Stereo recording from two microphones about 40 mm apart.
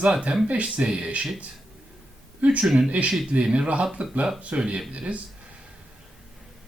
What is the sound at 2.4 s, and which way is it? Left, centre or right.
Speech, right.